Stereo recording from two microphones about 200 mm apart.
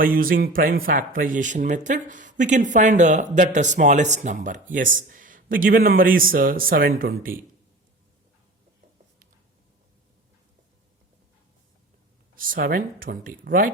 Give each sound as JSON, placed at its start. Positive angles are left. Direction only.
{"t": 0.0, "sound": "speech", "side_deg": -45}
{"t": 12.4, "sound": "speech", "side_deg": -45}